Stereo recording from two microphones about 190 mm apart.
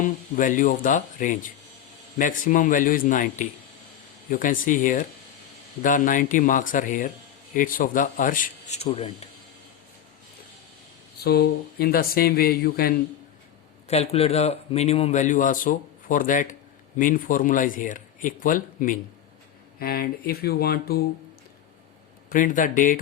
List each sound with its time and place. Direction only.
0.0 s speech: 45° left (ahead or behind)
11.2 s speech: 55° left (ahead or behind)
13.8 s a man's voice: 35° left (ahead or behind); by 21.0 s 55° left (ahead or behind)
22.3 s speech: 45° left (ahead or behind)